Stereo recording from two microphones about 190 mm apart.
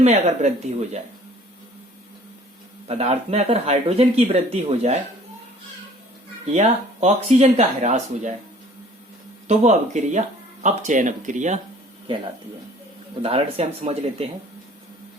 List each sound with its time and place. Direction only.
0.0 s speech: 35° right (ahead or behind)
2.8 s speech: 35° right (ahead or behind)
6.5 s speech: 35° right (ahead or behind)
9.5 s speech: 40° right (ahead or behind)
13.2 s speech: 30° right (ahead or behind)